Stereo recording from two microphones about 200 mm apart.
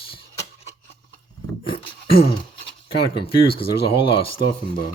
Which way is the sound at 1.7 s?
25° left (ahead or behind).